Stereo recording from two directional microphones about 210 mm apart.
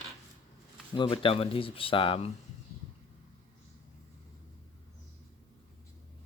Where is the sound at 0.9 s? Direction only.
25° left (ahead or behind).